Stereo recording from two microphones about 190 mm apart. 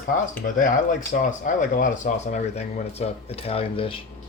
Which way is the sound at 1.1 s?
45° left (ahead or behind).